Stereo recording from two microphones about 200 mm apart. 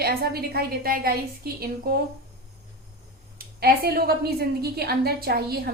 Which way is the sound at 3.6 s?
50° right (ahead or behind).